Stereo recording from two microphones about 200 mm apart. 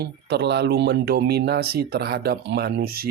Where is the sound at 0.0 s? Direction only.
55° right (ahead or behind).